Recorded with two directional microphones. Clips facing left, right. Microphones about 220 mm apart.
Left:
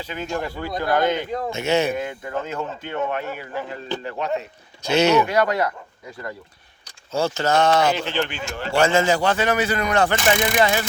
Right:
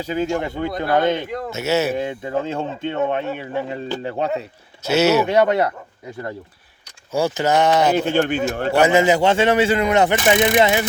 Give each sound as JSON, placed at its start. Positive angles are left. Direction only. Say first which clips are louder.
{"t": 0.0, "sound": "speech", "louder": "right 6 dB", "side_deg": -35}
{"t": 1.5, "sound": "a man's voice", "louder": "right 1 dB", "side_deg": -5}
{"t": 2.0, "sound": "speech", "louder": "right 4 dB", "side_deg": -25}
{"t": 4.9, "sound": "a man's voice", "louder": "right 1 dB", "side_deg": -5}
{"t": 5.2, "sound": "speech", "louder": "right 4 dB", "side_deg": -25}
{"t": 7.1, "sound": "speech", "louder": "right 2 dB", "side_deg": -15}
{"t": 7.9, "sound": "speech", "louder": "right 7 dB", "side_deg": -55}
{"t": 8.8, "sound": "speech", "louder": "right 3 dB", "side_deg": -15}